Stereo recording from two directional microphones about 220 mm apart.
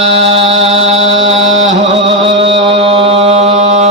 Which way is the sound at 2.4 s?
25° right (ahead or behind).